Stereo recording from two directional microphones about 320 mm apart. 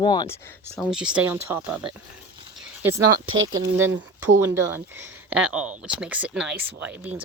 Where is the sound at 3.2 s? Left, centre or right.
Right.